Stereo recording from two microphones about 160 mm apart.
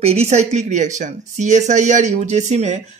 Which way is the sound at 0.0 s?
40° right (ahead or behind).